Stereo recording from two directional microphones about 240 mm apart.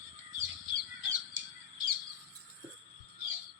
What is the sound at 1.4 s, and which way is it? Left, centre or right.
Bird, right.